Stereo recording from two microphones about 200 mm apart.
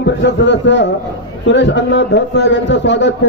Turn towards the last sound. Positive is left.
turn(degrees=60)  # may be behind; listen again after turning